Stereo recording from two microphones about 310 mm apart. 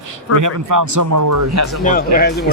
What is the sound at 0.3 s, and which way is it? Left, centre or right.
Speech, right.